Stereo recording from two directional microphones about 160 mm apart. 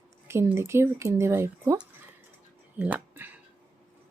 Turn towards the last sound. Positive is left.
turn(degrees=-10)  # may be behind; listen again after turning